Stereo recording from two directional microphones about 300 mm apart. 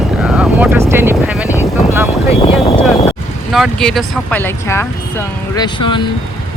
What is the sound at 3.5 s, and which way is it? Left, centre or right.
Speech, centre.